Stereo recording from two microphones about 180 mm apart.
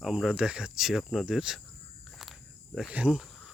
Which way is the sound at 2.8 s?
5° right (ahead or behind).